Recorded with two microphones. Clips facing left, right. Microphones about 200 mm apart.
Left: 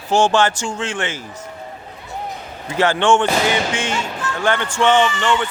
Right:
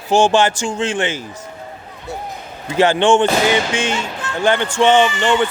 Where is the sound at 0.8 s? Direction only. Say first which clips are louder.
Right 6 dB; 25° right (ahead or behind).